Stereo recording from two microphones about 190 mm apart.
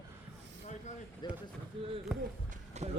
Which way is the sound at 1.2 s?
25° left (ahead or behind).